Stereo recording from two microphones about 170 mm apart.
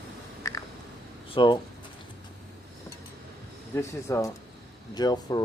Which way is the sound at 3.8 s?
15° left (ahead or behind).